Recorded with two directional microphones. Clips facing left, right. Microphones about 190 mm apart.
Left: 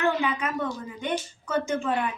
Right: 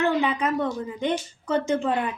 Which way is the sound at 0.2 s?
35° right (ahead or behind).